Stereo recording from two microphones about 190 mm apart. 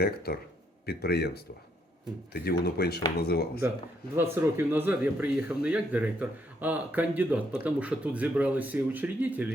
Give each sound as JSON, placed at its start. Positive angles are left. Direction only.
{"t": 0.0, "sound": "speech", "side_deg": 55}
{"t": 4.1, "sound": "speech", "side_deg": -15}